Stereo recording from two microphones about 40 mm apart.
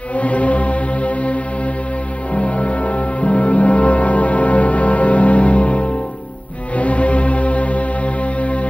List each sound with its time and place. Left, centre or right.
0.1 s music: left